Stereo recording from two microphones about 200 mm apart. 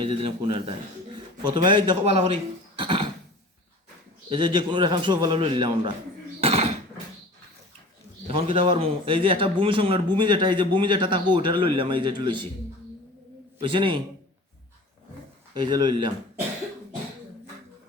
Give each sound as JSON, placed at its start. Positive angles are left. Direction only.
{"t": 0.0, "sound": "a man's voice", "side_deg": -25}
{"t": 2.7, "sound": "a sound", "side_deg": -25}
{"t": 4.3, "sound": "a man's voice", "side_deg": -20}
{"t": 6.4, "sound": "a sound", "side_deg": -30}
{"t": 8.3, "sound": "a man's voice", "side_deg": -30}
{"t": 13.6, "sound": "a man's voice", "side_deg": -25}
{"t": 15.5, "sound": "a man's voice", "side_deg": -20}